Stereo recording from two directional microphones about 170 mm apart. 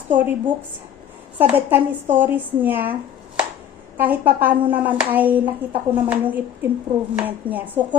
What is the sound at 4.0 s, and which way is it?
Speech, 10° right (ahead or behind).